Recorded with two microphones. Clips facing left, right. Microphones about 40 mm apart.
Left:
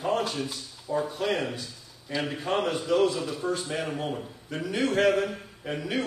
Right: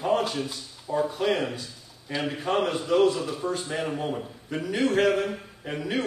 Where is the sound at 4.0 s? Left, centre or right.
Centre.